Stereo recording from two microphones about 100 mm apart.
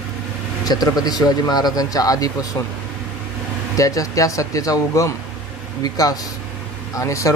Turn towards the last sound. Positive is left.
turn(degrees=30)  # may be behind; listen again after turning